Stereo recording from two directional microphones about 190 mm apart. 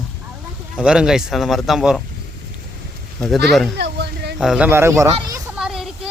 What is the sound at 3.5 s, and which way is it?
Speech, centre (ahead or behind).